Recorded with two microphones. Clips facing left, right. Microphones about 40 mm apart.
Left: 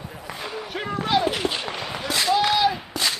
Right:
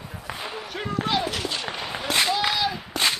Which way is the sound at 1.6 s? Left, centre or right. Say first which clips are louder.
Left 1 dB; centre.